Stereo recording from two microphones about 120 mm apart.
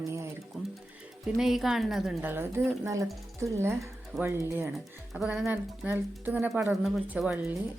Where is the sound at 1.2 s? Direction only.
Centre (ahead or behind).